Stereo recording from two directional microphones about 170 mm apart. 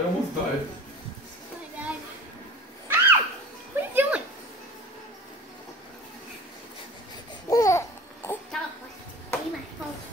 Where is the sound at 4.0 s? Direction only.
10° right (ahead or behind).